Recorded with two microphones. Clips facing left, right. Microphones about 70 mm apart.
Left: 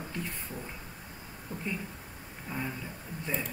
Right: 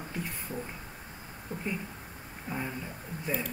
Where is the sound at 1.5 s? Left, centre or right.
Centre.